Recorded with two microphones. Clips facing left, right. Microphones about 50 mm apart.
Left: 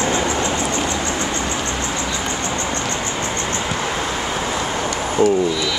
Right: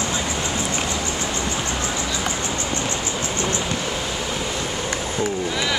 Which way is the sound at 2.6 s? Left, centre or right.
Left.